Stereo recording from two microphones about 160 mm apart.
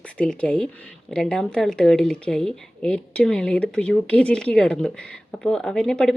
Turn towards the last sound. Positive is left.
turn(degrees=5)  # may be behind; listen again after turning